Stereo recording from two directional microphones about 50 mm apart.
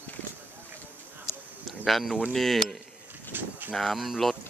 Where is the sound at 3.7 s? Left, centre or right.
Centre.